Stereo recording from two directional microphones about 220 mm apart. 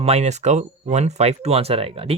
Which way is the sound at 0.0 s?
30° right (ahead or behind).